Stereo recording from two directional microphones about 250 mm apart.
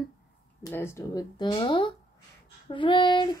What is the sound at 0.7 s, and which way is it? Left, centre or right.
Child singing, centre.